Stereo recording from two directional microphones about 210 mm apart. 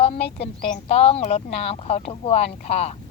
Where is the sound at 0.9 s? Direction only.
30° left (ahead or behind).